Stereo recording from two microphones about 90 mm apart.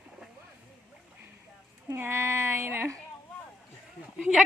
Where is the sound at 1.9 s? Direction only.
25° right (ahead or behind).